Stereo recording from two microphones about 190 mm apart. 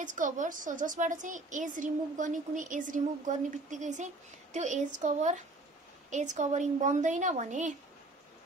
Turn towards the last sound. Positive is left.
turn(degrees=-40)  # may be behind; listen again after turning